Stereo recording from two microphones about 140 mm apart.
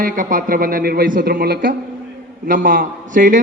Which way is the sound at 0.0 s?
80° right.